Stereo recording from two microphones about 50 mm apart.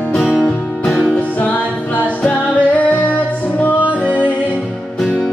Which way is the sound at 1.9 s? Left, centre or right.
Left.